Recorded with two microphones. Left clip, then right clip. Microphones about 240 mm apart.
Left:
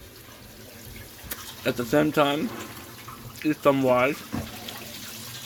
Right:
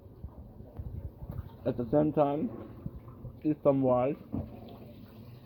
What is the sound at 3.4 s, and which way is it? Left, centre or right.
Speech, left.